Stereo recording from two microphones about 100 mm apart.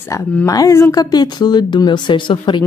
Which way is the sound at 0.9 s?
40° left (ahead or behind).